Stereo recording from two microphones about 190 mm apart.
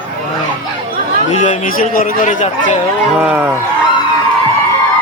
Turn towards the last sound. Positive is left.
turn(degrees=-10)  # may be behind; listen again after turning